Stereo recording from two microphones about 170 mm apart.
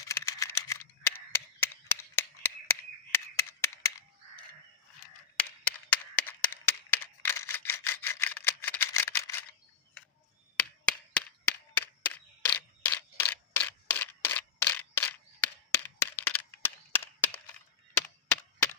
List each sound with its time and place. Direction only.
0.0 s camera: 15° left (ahead or behind)
5.9 s single-lens reflex camera: 10° left (ahead or behind)
10.6 s a sound: 10° left (ahead or behind)
18.3 s crack: 15° left (ahead or behind)